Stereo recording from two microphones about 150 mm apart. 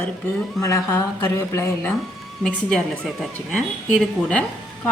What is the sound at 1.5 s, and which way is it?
Speech, 20° left (ahead or behind).